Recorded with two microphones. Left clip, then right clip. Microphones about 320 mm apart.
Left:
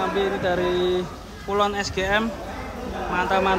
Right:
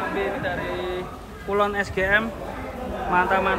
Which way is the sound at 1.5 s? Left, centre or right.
Centre.